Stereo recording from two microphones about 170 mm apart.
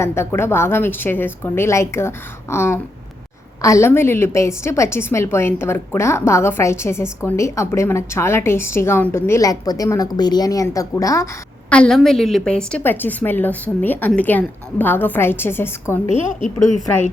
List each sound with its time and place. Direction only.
0.0 s a woman's voice: 15° left (ahead or behind)
11.7 s a woman's voice: 5° left (ahead or behind)